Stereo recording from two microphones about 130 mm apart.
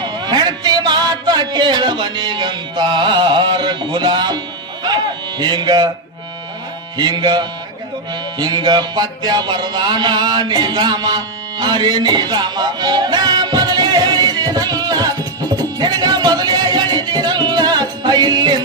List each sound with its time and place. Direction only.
0.0 s a sound: 35° right (ahead or behind)
5.4 s speech: 35° right (ahead or behind)
6.9 s speech: 35° right (ahead or behind)
8.4 s music: 35° right (ahead or behind)